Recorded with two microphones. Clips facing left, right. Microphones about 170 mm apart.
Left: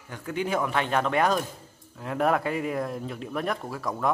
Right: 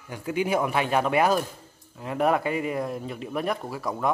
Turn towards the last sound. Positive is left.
turn(degrees=0)  # may be behind; listen again after turning